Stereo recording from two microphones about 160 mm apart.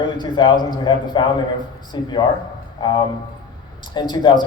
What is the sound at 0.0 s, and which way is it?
A man's voice, 30° left (ahead or behind).